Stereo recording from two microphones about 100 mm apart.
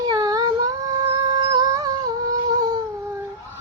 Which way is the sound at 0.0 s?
40° right (ahead or behind).